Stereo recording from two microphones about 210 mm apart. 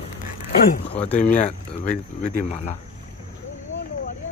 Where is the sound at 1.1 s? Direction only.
35° left (ahead or behind).